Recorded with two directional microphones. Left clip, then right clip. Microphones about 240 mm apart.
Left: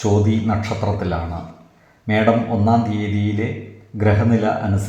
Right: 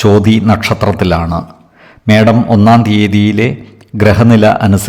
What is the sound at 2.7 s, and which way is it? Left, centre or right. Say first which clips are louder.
A man's voice: right 10 dB; right.